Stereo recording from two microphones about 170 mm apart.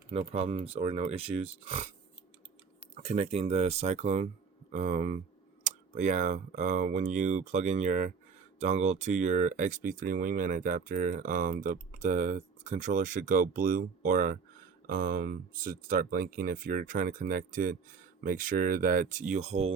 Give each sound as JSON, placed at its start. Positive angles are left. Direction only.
{"t": 0.1, "sound": "speech", "side_deg": -40}
{"t": 2.9, "sound": "speech", "side_deg": -40}